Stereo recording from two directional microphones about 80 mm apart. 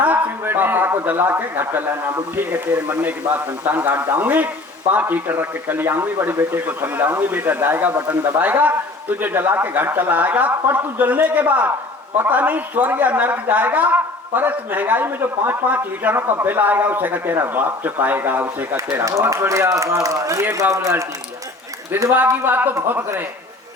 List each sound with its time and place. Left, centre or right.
0.0 s a man's voice: right
19.3 s a man's voice: right